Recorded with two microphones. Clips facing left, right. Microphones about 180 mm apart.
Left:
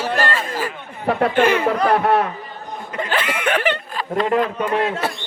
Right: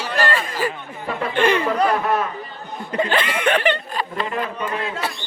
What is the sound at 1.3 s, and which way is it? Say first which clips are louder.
Speech: right 1 dB; 5° left (ahead or behind).